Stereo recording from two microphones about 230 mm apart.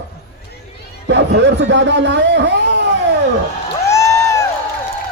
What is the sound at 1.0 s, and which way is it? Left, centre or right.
Speech, right.